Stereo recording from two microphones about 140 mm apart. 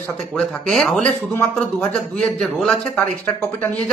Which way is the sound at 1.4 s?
15° left (ahead or behind).